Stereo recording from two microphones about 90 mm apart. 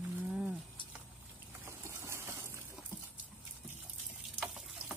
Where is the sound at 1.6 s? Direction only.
30° right (ahead or behind).